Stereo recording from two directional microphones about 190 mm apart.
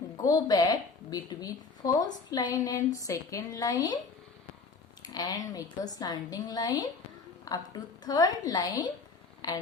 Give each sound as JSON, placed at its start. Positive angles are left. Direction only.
{"t": 0.2, "sound": "a woman's voice", "side_deg": 20}
{"t": 5.0, "sound": "a woman's voice", "side_deg": 20}